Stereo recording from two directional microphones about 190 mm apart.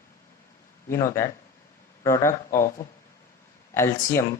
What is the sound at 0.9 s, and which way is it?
Speech, 15° left (ahead or behind).